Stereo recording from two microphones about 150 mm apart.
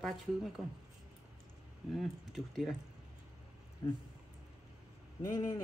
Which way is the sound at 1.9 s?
Centre (ahead or behind).